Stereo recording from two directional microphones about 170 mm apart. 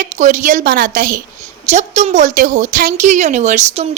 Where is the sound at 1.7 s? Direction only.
40° right (ahead or behind).